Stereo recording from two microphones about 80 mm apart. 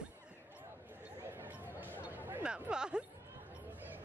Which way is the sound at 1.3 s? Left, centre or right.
Right.